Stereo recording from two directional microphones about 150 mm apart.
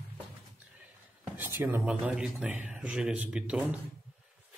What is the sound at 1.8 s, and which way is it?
A man's voice, 10° right (ahead or behind).